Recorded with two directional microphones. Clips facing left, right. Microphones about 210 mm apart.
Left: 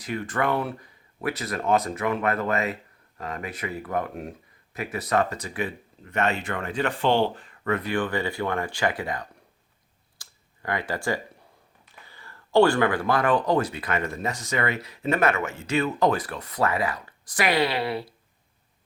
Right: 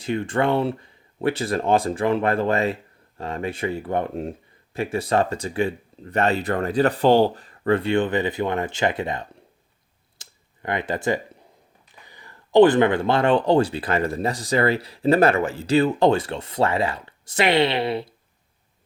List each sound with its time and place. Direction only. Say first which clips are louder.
0.0 s speech: right 5 dB; 25° right (ahead or behind)
10.2 s a sound: right 4 dB; 20° right (ahead or behind)
12.0 s speech: right 1 dB; 15° right (ahead or behind)